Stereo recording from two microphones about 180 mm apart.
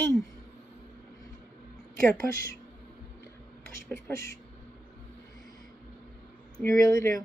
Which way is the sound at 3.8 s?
15° left (ahead or behind).